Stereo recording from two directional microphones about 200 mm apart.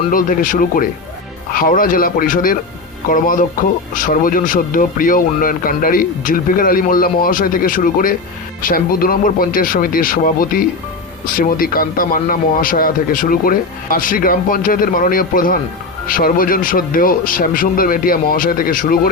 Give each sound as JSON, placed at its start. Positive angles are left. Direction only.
{"t": 0.1, "sound": "speech", "side_deg": 45}